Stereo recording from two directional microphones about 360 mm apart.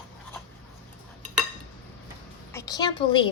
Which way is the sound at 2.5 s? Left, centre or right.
Centre.